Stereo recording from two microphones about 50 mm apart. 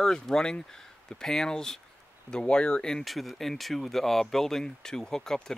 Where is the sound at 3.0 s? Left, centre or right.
Centre.